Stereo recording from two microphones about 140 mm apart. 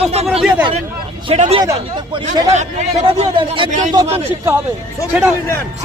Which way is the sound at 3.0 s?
40° right (ahead or behind).